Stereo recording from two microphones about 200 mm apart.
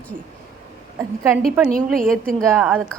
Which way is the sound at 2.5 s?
10° right (ahead or behind).